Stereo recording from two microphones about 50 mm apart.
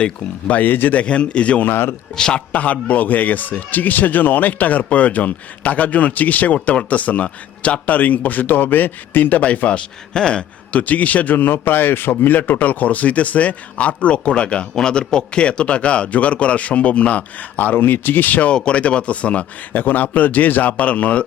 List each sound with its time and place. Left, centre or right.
0.4 s a man's voice: left
0.9 s a man's voice: left
1.6 s a man's voice: left
2.1 s a man's voice: centre; by 9.4 s left
9.4 s a man's voice: left
18.5 s a man's voice: left
19.7 s a man's voice: left